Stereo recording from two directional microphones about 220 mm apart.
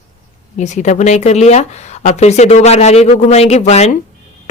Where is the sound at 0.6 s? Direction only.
30° left (ahead or behind).